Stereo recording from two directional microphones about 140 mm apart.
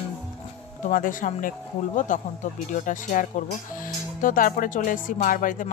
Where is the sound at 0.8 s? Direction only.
70° left (ahead or behind).